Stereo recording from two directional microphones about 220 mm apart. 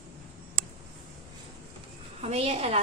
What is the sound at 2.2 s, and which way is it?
Speech, 30° right (ahead or behind).